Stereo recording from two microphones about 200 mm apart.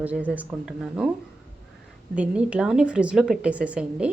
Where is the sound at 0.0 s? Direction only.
5° right (ahead or behind).